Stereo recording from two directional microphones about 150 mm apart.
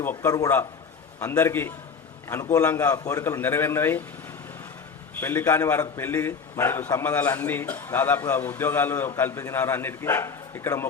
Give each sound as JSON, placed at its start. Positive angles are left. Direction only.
{"t": 0.0, "sound": "a man's voice", "side_deg": 15}
{"t": 5.2, "sound": "a man's voice", "side_deg": 15}